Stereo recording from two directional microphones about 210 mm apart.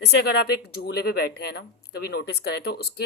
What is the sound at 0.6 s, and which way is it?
Speech, 50° left (ahead or behind).